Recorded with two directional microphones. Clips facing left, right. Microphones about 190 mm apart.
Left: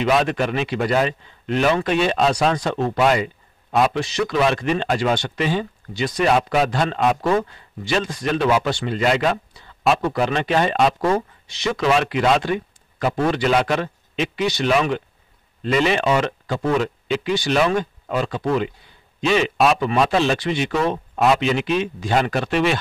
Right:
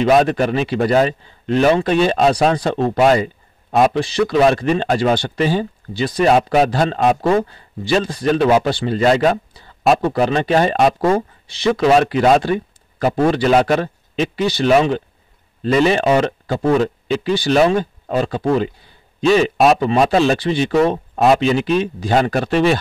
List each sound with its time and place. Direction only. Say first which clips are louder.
0.0 s speech: right 5 dB; 40° right (ahead or behind)